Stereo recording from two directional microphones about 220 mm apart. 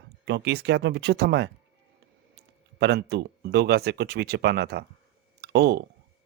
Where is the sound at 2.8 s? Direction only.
50° right (ahead or behind).